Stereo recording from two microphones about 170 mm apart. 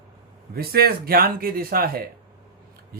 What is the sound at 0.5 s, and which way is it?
Speech, 65° right (ahead or behind).